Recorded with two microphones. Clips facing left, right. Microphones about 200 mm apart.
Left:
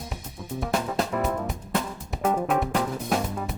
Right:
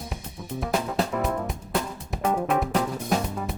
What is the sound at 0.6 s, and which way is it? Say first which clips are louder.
Music: right 1 dB; centre (ahead or behind).